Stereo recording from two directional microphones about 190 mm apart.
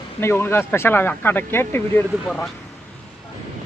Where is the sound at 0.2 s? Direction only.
15° left (ahead or behind).